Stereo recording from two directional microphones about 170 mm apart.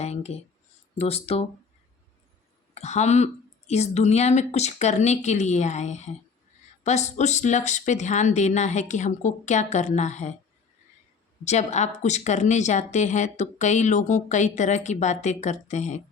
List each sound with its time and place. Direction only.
0.0 s a sound: 40° left (ahead or behind)
0.9 s speech: 35° left (ahead or behind)
2.7 s speech: 40° left (ahead or behind)
11.4 s speech: 40° left (ahead or behind)